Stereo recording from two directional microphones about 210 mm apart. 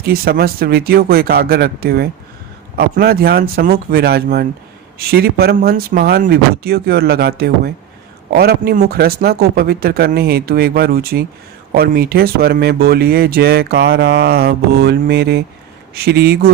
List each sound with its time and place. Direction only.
0.1 s speech: 45° right (ahead or behind)